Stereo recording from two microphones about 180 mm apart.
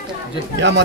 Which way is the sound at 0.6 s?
75° right (ahead or behind).